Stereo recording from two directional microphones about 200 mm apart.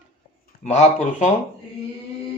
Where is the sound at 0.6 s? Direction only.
35° left (ahead or behind).